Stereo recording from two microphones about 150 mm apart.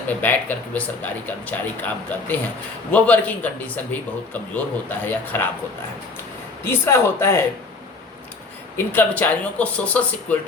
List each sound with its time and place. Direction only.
0.1 s speech: 10° left (ahead or behind)
6.7 s speech: 15° left (ahead or behind)
8.9 s speech: 10° left (ahead or behind)